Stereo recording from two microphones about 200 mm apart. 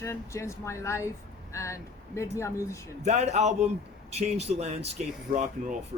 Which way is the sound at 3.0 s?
35° right (ahead or behind).